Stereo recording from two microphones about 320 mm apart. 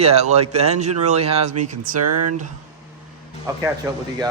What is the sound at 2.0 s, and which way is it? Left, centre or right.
Speech, right.